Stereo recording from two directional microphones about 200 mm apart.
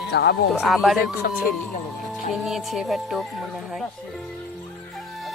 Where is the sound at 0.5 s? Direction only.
5° right (ahead or behind).